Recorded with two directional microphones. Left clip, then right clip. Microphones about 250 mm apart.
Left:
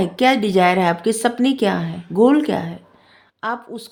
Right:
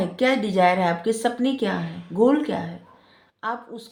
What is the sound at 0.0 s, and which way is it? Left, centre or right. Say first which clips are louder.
Speech: left 5 dB; left.